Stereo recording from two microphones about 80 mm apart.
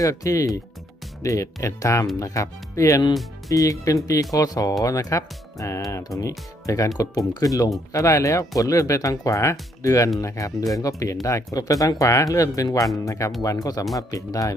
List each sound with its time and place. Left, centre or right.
0.0 s speech: left